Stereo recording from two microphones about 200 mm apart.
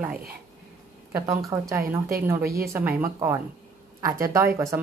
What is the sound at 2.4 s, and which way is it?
Speech, 50° right (ahead or behind).